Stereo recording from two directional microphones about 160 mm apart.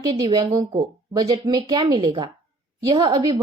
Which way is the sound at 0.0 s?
25° right (ahead or behind).